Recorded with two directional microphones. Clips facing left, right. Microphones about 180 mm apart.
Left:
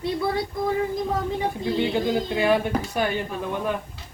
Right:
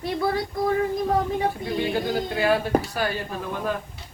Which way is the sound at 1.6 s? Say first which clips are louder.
Left 2 dB; 20° left (ahead or behind).